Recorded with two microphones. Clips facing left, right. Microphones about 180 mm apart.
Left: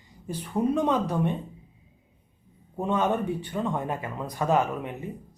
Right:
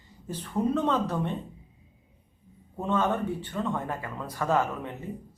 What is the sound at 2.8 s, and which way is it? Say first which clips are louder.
Speech: left 2 dB; 15° left (ahead or behind).